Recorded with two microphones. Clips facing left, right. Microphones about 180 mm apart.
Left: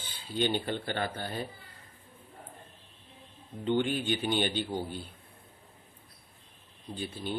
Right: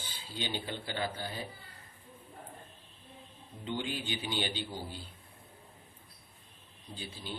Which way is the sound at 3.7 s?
60° left (ahead or behind).